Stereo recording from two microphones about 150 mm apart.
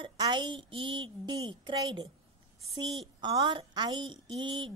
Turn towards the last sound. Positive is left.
turn(degrees=-35)  # may be behind; listen again after turning